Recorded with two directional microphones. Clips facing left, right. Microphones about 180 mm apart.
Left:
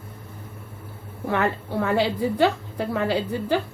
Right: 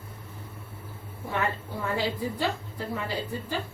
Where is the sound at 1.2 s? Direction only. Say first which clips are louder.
Left 6 dB; 75° left (ahead or behind).